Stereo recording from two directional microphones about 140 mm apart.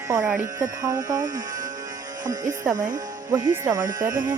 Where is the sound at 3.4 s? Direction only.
30° right (ahead or behind).